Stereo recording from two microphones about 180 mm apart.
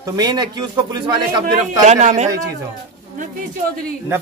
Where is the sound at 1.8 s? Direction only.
40° right (ahead or behind).